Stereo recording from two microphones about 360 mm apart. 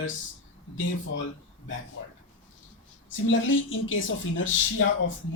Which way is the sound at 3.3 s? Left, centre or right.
Left.